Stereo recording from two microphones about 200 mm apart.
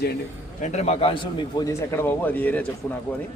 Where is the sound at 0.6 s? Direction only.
35° left (ahead or behind).